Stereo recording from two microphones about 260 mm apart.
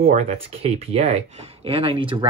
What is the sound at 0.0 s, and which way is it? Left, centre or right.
Speech, right.